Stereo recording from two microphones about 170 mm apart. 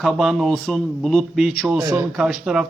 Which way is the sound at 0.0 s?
Centre (ahead or behind).